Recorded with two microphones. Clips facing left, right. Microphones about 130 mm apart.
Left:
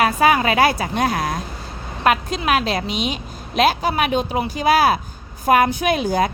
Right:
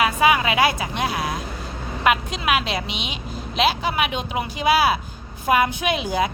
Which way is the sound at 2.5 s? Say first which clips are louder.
Left 3 dB; 40° left (ahead or behind).